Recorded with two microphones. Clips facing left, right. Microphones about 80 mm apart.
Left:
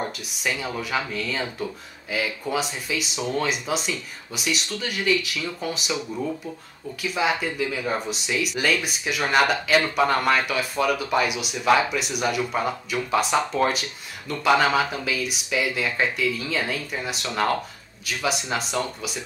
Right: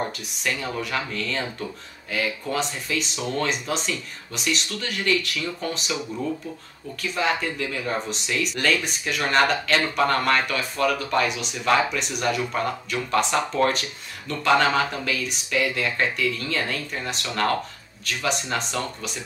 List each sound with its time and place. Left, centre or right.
0.0 s speech: centre